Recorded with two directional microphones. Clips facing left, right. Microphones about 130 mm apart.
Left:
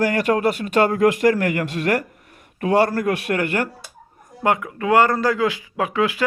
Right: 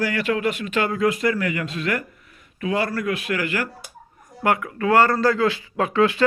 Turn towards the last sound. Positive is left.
turn(degrees=10)  # may be behind; listen again after turning